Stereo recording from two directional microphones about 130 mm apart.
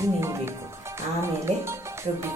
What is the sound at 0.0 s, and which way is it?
Music, 20° right (ahead or behind).